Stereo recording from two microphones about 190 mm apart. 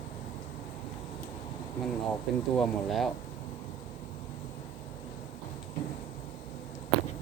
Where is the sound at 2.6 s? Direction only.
Centre (ahead or behind).